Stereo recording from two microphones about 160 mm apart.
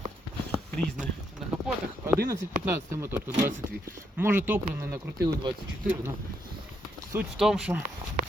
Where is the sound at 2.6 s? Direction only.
15° right (ahead or behind).